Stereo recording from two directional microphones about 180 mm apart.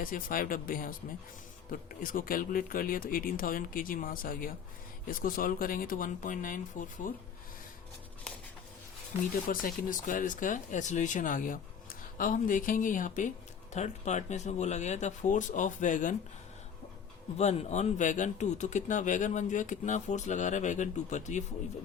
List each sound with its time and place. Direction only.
0.0 s speech: 50° left (ahead or behind)
9.5 s speech: 50° left (ahead or behind)
17.3 s speech: 35° left (ahead or behind)